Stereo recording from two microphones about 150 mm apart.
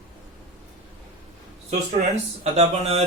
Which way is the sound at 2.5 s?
45° right (ahead or behind).